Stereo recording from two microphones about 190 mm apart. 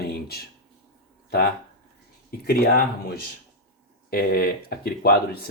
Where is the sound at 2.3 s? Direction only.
55° left (ahead or behind).